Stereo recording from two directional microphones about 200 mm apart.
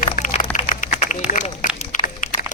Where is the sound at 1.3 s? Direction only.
35° left (ahead or behind).